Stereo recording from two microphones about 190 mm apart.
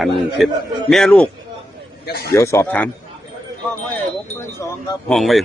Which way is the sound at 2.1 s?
55° left (ahead or behind).